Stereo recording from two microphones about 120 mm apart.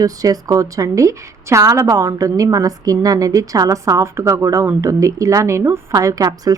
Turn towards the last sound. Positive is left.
turn(degrees=-30)  # may be behind; listen again after turning